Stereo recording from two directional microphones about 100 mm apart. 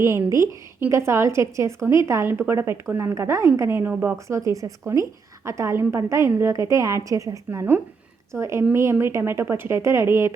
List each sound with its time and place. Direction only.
0.0 s a woman's voice: 25° right (ahead or behind)
4.4 s a woman's voice: 35° right (ahead or behind)